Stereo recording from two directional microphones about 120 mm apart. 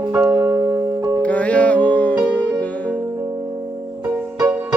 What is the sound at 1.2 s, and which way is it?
Music, 10° left (ahead or behind).